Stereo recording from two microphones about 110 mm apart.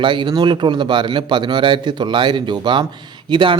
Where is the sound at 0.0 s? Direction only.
45° right (ahead or behind).